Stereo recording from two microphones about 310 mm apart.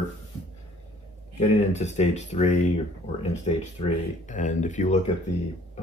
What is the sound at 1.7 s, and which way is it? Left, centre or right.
Speech, left.